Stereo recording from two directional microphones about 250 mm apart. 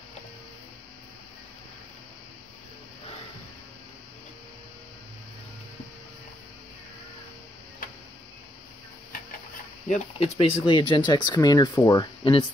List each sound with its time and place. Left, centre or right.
9.8 s speech: left